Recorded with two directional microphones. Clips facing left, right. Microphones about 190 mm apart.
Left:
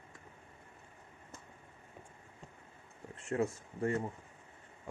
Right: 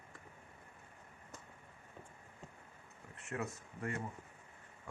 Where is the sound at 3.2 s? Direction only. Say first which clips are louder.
Left 8 dB; 30° left (ahead or behind).